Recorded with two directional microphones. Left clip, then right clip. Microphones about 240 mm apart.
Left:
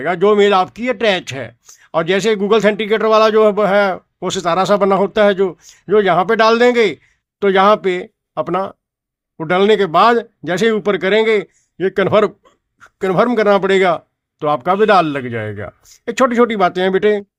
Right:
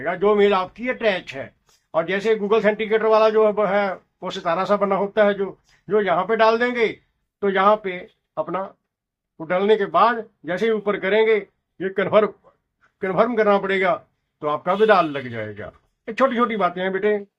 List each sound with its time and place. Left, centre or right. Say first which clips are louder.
0.0 s speech: left 6 dB; left